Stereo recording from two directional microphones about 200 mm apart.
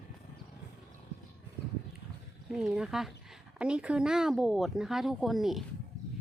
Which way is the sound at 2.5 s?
5° right (ahead or behind).